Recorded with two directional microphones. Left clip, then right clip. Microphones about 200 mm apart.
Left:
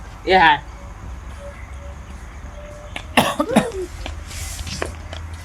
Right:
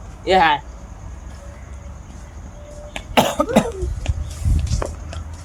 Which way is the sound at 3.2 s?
5° left (ahead or behind).